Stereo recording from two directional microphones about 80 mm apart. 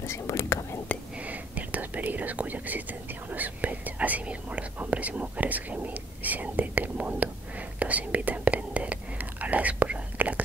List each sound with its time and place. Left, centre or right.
0.1 s speech: left
1.2 s whispering: centre